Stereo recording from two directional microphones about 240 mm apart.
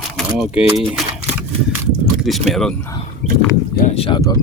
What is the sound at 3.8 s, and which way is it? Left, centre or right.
Speech, left.